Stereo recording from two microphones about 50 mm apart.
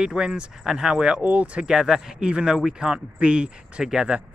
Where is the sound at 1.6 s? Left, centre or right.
Centre.